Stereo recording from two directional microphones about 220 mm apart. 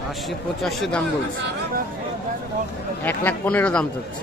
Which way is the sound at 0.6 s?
Centre (ahead or behind).